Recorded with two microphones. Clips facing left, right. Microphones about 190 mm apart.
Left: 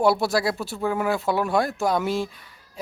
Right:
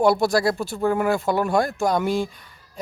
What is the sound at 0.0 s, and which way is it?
Speech, 5° left (ahead or behind).